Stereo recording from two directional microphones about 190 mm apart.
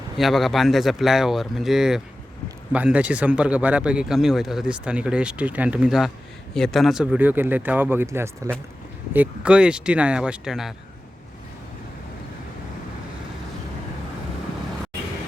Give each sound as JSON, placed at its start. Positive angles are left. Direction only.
{"t": 0.2, "sound": "speech", "side_deg": 0}